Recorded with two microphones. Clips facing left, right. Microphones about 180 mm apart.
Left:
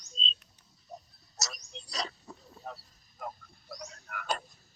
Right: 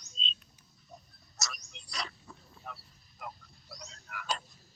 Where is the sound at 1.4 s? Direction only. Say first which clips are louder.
Left 2 dB; 35° left (ahead or behind); by 4.4 s 50° left (ahead or behind).